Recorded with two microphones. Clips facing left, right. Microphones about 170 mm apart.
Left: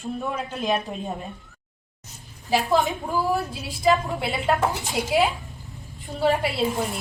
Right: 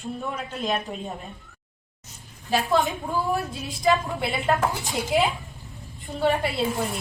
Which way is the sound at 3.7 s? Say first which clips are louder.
Left 2 dB; centre (ahead or behind).